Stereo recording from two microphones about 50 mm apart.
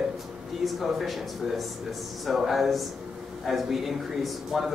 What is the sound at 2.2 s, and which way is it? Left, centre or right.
A man's voice, centre.